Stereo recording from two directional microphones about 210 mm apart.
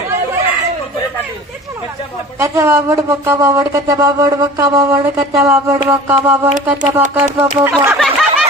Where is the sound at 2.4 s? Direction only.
15° right (ahead or behind).